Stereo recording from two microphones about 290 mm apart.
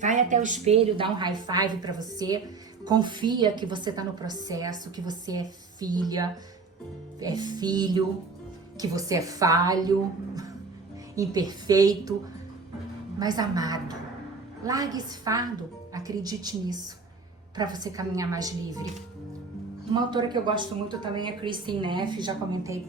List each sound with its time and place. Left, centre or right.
0.0 s a woman's voice: right
11.1 s a woman's voice: centre
13.1 s a woman's voice: centre
19.9 s a woman's voice: centre